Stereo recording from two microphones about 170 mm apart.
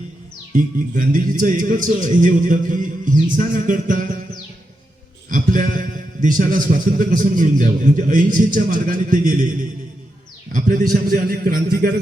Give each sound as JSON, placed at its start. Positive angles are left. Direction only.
{"t": 0.5, "sound": "a man's voice", "side_deg": -55}
{"t": 5.3, "sound": "a man's voice", "side_deg": -50}
{"t": 10.5, "sound": "a man's voice", "side_deg": -50}